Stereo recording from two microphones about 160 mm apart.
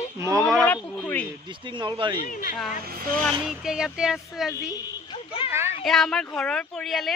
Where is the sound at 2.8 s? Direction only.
65° right (ahead or behind).